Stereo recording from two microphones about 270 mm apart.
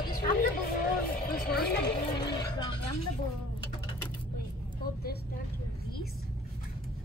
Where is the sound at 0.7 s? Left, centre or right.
Left.